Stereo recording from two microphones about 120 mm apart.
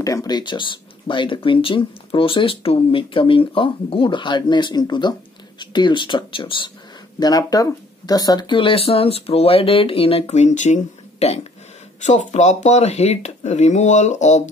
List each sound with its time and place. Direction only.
0.0 s speech: 30° left (ahead or behind); by 6.7 s 45° left (ahead or behind)
7.2 s speech: 35° left (ahead or behind); by 11.4 s 60° left (ahead or behind)
12.0 s speech: 80° left